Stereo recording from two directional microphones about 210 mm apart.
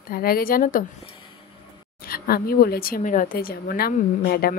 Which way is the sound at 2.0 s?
45° left (ahead or behind).